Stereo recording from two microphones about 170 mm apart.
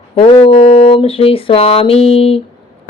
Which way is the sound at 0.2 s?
35° left (ahead or behind).